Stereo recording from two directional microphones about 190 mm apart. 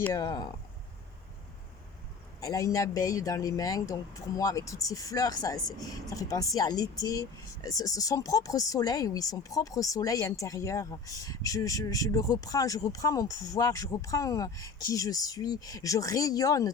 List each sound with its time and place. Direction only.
0.0 s speech: 20° left (ahead or behind)
2.4 s speech: 15° left (ahead or behind)